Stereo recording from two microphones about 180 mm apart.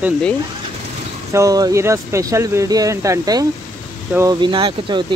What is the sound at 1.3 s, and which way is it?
Speech, 20° right (ahead or behind).